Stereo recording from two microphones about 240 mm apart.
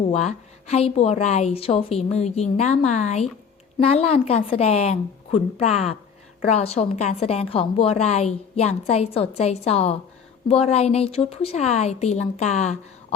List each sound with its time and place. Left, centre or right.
0.1 s a woman's voice: left